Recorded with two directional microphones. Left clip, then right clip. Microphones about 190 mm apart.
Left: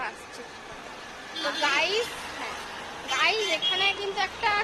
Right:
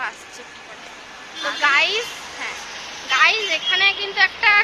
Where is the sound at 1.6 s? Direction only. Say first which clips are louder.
Right 9 dB; centre (ahead or behind).